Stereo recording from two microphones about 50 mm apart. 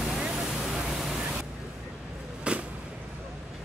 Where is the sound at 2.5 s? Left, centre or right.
Right.